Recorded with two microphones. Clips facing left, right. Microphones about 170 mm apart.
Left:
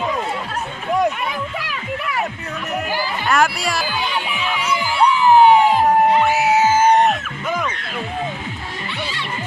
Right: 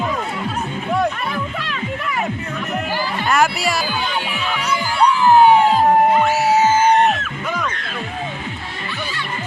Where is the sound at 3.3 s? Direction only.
Centre (ahead or behind).